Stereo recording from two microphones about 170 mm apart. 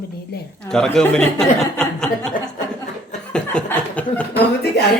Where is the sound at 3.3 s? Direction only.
5° left (ahead or behind).